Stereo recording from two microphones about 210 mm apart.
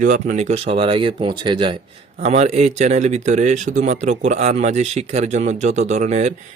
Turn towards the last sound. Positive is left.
turn(degrees=-30)  # may be behind; listen again after turning